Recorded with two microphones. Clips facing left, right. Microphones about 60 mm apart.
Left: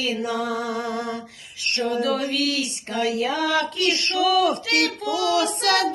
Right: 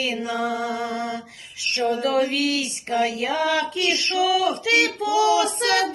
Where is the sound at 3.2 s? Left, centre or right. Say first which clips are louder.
Even; right.